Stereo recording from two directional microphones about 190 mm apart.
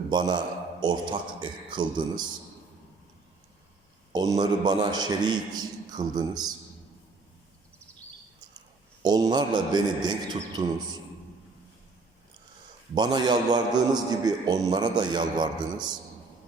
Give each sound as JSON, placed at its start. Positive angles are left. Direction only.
{"t": 0.1, "sound": "a man's voice", "side_deg": -25}
{"t": 4.1, "sound": "a man's voice", "side_deg": -20}
{"t": 9.0, "sound": "a man's voice", "side_deg": -20}
{"t": 12.9, "sound": "a man's voice", "side_deg": -20}